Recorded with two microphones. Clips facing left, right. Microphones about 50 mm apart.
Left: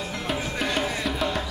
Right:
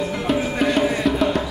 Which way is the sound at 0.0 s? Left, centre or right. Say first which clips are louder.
Right 8 dB; centre.